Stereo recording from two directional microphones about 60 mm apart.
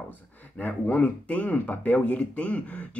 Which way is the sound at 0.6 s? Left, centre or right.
Left.